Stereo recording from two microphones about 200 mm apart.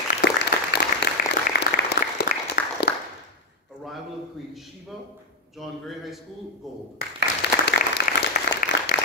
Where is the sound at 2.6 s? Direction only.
50° left (ahead or behind).